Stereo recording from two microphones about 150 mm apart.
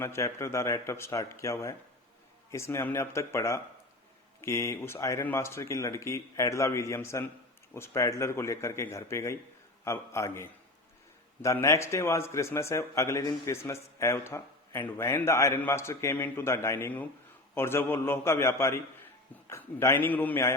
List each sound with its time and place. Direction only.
0.0 s a man's voice: 20° left (ahead or behind)